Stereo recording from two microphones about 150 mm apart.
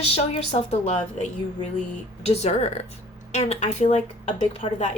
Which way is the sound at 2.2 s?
50° left (ahead or behind).